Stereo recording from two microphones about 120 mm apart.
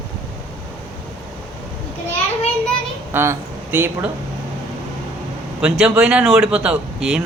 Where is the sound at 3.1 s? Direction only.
20° right (ahead or behind).